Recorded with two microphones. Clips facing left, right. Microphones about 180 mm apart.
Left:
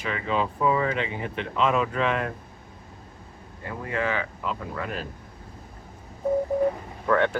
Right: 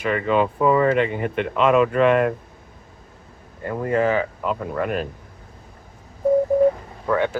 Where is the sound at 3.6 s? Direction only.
45° right (ahead or behind).